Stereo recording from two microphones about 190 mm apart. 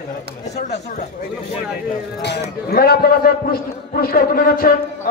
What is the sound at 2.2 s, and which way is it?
A man's voice, 60° left (ahead or behind).